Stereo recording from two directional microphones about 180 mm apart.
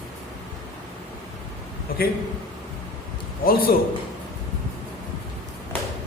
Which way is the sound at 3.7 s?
55° left (ahead or behind).